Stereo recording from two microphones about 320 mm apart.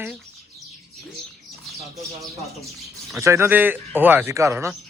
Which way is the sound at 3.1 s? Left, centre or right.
Centre.